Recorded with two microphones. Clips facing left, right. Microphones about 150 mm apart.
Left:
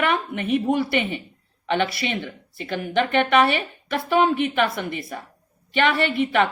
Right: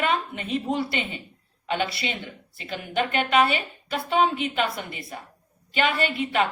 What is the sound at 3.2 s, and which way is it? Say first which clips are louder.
Speech: left 3 dB; 65° left (ahead or behind).